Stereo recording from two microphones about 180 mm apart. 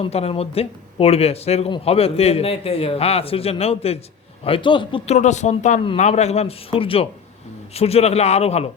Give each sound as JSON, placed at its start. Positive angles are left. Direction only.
{"t": 0.0, "sound": "speech", "side_deg": 35}